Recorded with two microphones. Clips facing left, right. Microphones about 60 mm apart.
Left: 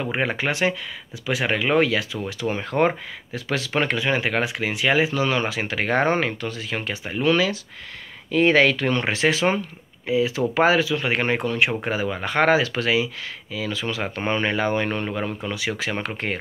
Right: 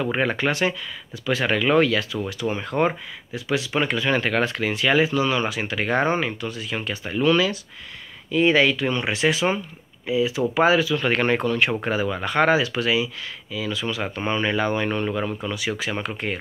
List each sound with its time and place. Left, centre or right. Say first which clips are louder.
0.2 s speech: left 1 dB; left
2.4 s speech: left 1 dB; centre
3.3 s speech: even; left
4.0 s speech: right 1 dB; left
6.9 s speech: right 1 dB; left
8.3 s speech: left 1 dB; left
9.0 s speech: even; left
12.4 s speech: left 1 dB; left